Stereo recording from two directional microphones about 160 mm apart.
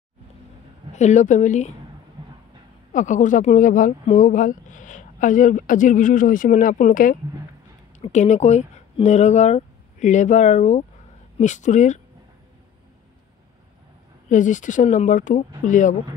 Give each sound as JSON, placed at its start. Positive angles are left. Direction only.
{"t": 0.9, "sound": "speech", "side_deg": 50}
{"t": 2.2, "sound": "train", "side_deg": -30}
{"t": 2.9, "sound": "speech", "side_deg": 50}
{"t": 8.0, "sound": "speech", "side_deg": 45}
{"t": 14.3, "sound": "speech", "side_deg": 50}